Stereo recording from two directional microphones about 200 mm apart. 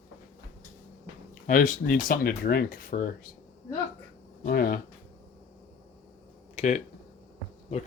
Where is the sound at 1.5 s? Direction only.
40° left (ahead or behind).